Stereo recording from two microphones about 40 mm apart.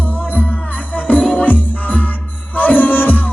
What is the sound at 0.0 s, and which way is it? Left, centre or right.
Music, left.